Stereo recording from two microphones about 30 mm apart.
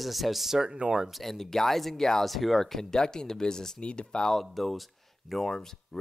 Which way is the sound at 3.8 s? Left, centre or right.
Left.